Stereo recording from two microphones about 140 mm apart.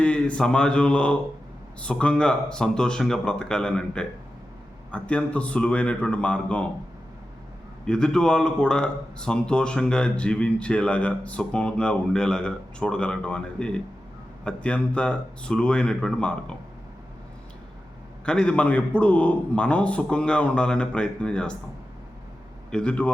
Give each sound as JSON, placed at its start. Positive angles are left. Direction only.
{"t": 0.0, "sound": "speech", "side_deg": 10}
{"t": 7.9, "sound": "speech", "side_deg": 5}
{"t": 18.3, "sound": "speech", "side_deg": 5}
{"t": 22.7, "sound": "speech", "side_deg": 5}